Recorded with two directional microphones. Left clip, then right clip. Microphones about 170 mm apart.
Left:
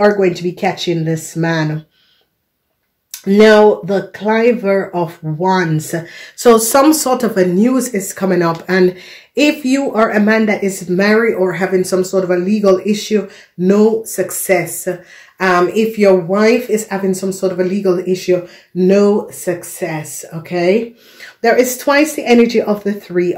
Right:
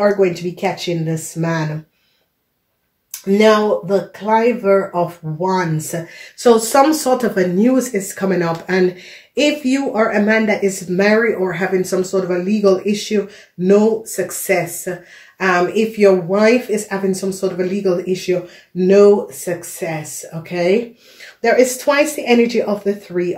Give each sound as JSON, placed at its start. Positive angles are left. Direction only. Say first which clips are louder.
{"t": 0.2, "sound": "speech", "louder": "left 2 dB", "side_deg": 55}
{"t": 3.3, "sound": "speech", "louder": "left 5 dB", "side_deg": 60}